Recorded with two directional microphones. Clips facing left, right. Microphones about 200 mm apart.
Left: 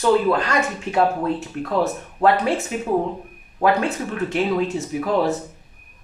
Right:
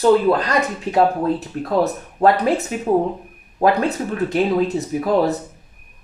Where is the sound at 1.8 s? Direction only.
35° right (ahead or behind).